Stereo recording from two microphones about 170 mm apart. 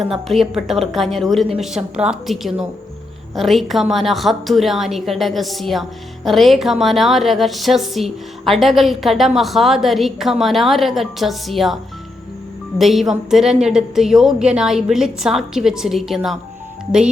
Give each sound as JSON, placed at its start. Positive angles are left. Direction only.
{"t": 0.0, "sound": "a woman's voice", "side_deg": 0}
{"t": 12.8, "sound": "a woman's voice", "side_deg": 0}